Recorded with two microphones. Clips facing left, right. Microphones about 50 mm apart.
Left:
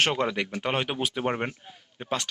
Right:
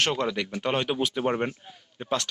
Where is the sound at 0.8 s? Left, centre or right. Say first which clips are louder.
Right 3 dB; left.